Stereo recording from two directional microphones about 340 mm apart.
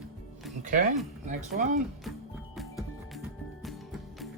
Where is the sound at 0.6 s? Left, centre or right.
Right.